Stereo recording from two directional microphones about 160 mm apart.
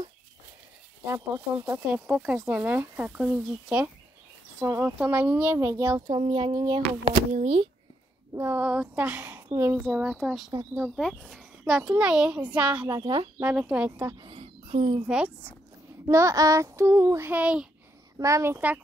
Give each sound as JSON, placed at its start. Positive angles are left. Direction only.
{"t": 1.0, "sound": "a child's voice", "side_deg": -15}
{"t": 8.4, "sound": "a child's voice", "side_deg": -15}
{"t": 12.8, "sound": "speech", "side_deg": -25}
{"t": 13.4, "sound": "a child's voice", "side_deg": -5}
{"t": 14.2, "sound": "a sound", "side_deg": -30}
{"t": 15.0, "sound": "a child's voice", "side_deg": -5}
{"t": 16.1, "sound": "a child's voice", "side_deg": -20}
{"t": 18.1, "sound": "a child's voice", "side_deg": -20}